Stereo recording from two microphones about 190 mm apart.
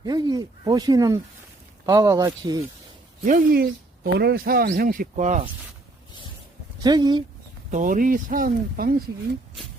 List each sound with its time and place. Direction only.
0.0 s speech: 20° right (ahead or behind)
3.2 s speech: 50° right (ahead or behind)
6.7 s speech: 20° right (ahead or behind)
7.7 s speech: 45° right (ahead or behind)